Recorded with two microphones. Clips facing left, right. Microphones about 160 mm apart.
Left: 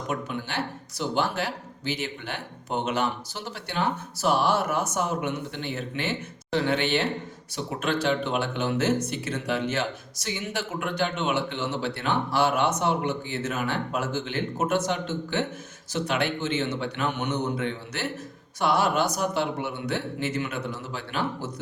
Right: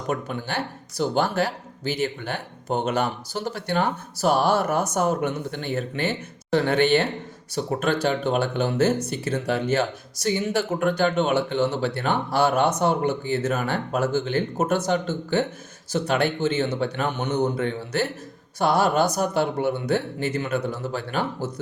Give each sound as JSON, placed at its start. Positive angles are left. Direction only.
{"t": 0.1, "sound": "speech", "side_deg": -45}